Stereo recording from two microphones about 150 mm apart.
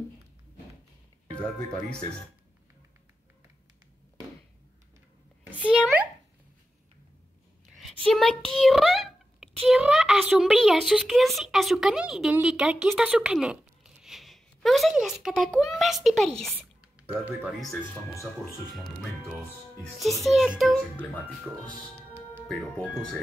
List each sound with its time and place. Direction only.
1.3 s speech: 5° left (ahead or behind)
5.7 s speech: 10° right (ahead or behind)
7.9 s a woman's voice: 5° left (ahead or behind)
8.5 s a sound: centre (ahead or behind)
9.7 s a woman's voice: 5° right (ahead or behind)
17.1 s speech: 10° right (ahead or behind)
18.2 s a woman's voice: centre (ahead or behind)